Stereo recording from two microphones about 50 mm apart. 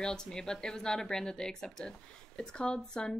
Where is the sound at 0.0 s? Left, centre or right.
Centre.